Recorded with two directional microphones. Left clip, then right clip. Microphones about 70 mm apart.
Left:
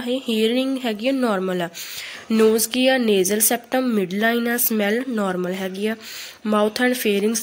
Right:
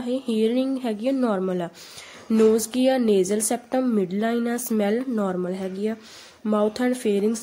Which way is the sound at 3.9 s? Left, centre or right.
Centre.